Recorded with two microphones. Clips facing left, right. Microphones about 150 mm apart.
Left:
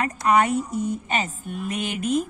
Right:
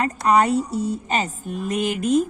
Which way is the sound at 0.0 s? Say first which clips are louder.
Right 2 dB; 35° right (ahead or behind).